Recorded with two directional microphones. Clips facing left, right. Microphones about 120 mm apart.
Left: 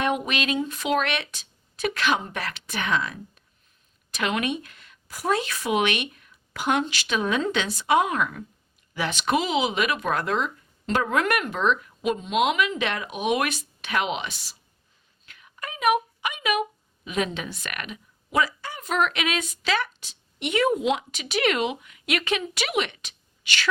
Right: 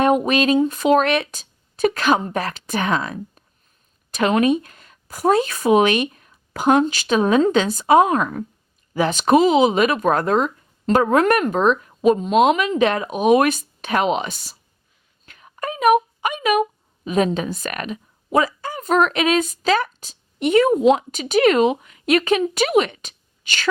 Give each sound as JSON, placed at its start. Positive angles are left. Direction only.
{"t": 0.0, "sound": "speech", "side_deg": -40}
{"t": 15.3, "sound": "a sound", "side_deg": -40}
{"t": 16.2, "sound": "speech", "side_deg": -40}